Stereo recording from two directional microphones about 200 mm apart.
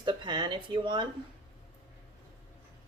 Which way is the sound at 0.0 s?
20° right (ahead or behind).